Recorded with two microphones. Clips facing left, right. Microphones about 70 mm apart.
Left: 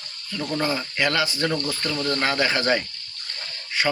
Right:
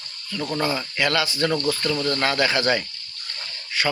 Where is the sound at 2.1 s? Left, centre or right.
Centre.